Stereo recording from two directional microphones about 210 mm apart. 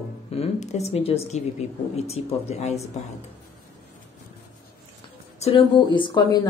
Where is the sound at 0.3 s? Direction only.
30° left (ahead or behind).